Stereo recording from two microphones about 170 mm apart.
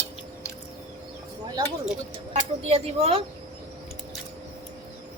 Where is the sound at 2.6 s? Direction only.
35° right (ahead or behind).